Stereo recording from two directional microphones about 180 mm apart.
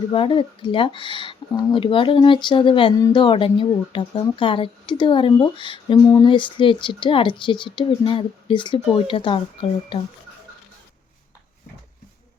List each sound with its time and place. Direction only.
0.1 s speech: 30° left (ahead or behind)